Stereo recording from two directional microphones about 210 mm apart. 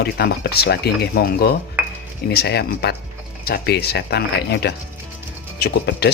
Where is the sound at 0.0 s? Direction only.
50° left (ahead or behind).